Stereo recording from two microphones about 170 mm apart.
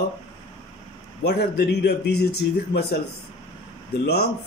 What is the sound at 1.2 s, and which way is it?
Speech, 75° left (ahead or behind).